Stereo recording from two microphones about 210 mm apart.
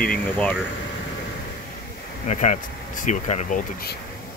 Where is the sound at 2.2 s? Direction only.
35° left (ahead or behind).